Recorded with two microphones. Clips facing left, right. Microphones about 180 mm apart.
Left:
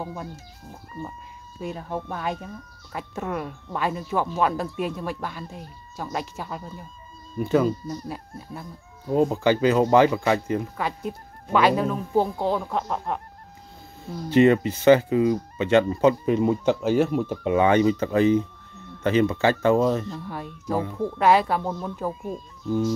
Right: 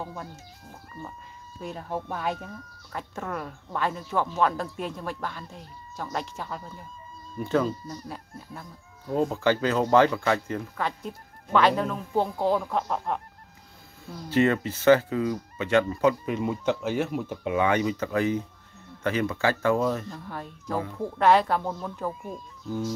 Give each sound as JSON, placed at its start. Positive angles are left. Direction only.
{"t": 0.0, "sound": "speech", "side_deg": 10}
{"t": 1.6, "sound": "speech", "side_deg": 0}
{"t": 2.9, "sound": "speech", "side_deg": 10}
{"t": 14.3, "sound": "speech", "side_deg": 20}
{"t": 20.2, "sound": "speech", "side_deg": 10}